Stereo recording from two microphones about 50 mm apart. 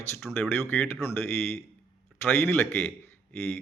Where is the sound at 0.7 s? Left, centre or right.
Left.